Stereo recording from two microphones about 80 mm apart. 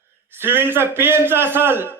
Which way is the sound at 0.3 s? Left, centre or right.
Right.